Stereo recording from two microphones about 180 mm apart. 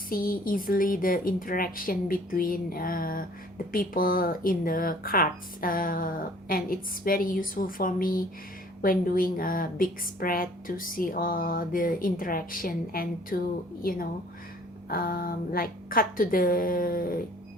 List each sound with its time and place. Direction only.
0.1 s a woman's voice: 50° left (ahead or behind)